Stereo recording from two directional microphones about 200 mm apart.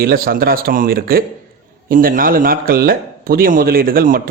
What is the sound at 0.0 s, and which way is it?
Speech, 50° right (ahead or behind).